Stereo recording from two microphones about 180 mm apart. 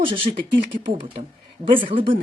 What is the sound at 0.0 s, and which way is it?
A woman's voice, 30° right (ahead or behind).